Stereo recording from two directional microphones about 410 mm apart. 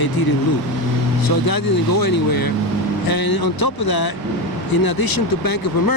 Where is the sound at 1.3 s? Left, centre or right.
Left.